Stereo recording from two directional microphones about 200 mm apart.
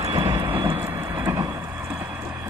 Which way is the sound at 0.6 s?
15° right (ahead or behind).